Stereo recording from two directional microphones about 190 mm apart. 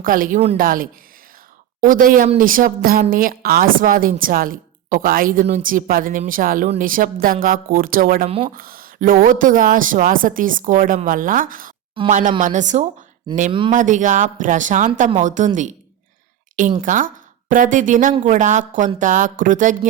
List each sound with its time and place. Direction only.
0.0 s a woman's voice: 45° right (ahead or behind)